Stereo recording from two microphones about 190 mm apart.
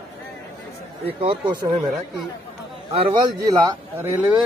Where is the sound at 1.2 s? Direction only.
25° right (ahead or behind).